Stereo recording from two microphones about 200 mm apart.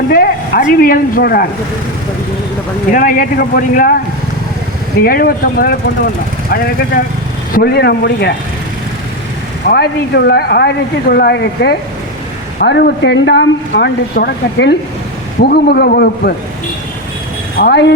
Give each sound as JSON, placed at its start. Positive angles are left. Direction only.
{"t": 0.1, "sound": "a sound", "side_deg": 45}
{"t": 0.7, "sound": "speech", "side_deg": 45}
{"t": 2.9, "sound": "speech", "side_deg": 45}
{"t": 5.0, "sound": "speech", "side_deg": 45}
{"t": 7.5, "sound": "speech", "side_deg": 50}
{"t": 9.6, "sound": "speech", "side_deg": 55}
{"t": 17.6, "sound": "speech", "side_deg": 55}